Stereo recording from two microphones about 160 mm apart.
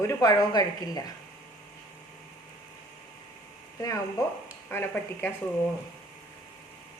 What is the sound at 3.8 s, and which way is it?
A woman's voice, 20° left (ahead or behind).